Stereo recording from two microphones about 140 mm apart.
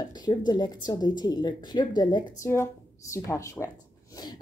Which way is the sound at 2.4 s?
20° left (ahead or behind).